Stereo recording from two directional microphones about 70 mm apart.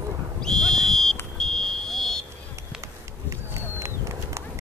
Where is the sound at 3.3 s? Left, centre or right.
Right.